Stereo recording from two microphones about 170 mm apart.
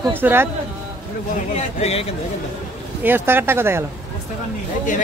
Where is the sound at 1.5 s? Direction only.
40° left (ahead or behind).